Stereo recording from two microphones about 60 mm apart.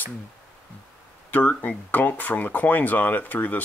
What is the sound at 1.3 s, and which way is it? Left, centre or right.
Speech, left.